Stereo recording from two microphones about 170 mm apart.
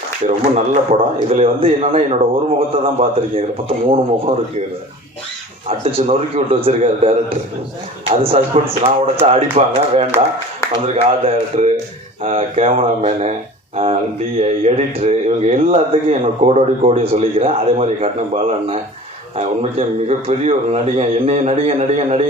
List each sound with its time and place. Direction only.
0.3 s a man's voice: 40° right (ahead or behind)
5.6 s a man's voice: 35° right (ahead or behind)
19.4 s a man's voice: 35° right (ahead or behind)